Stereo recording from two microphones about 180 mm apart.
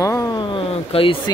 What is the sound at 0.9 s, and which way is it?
Speech, 30° left (ahead or behind).